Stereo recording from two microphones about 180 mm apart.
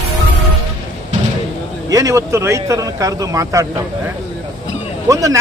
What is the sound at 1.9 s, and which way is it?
A man's voice, 15° right (ahead or behind).